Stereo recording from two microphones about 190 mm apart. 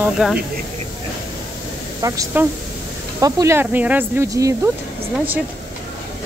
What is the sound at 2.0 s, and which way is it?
Speech, 15° right (ahead or behind).